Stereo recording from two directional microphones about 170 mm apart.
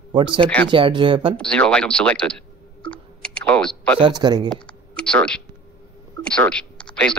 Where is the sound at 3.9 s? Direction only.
25° right (ahead or behind).